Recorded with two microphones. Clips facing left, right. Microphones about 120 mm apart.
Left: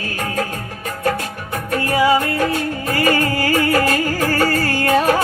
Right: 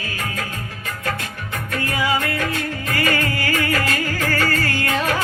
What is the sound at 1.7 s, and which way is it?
Music, 30° left (ahead or behind).